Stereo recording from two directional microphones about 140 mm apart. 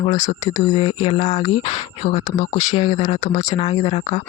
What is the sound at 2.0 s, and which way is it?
Speech, 60° left (ahead or behind).